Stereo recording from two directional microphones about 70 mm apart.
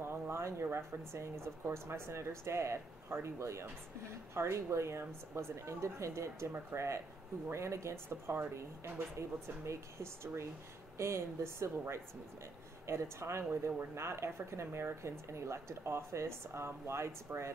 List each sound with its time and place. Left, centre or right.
0.0 s speech: right